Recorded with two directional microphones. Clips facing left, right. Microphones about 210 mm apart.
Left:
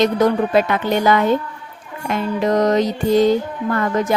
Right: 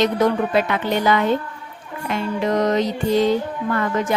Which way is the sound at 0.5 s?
45° left (ahead or behind).